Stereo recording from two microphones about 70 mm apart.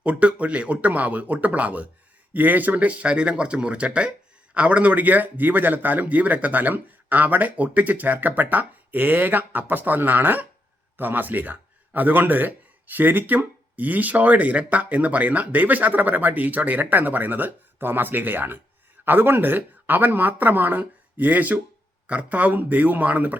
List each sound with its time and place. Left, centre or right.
0.0 s speech: centre